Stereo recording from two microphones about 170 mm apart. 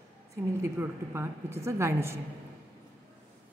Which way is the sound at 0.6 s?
15° right (ahead or behind).